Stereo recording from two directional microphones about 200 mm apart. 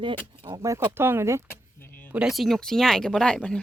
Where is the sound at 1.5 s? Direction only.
10° left (ahead or behind).